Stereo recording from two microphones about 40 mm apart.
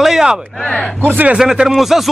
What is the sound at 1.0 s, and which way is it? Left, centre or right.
Speech, right.